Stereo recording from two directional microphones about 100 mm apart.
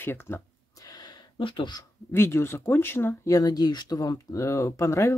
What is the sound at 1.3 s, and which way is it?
Speech, 55° left (ahead or behind).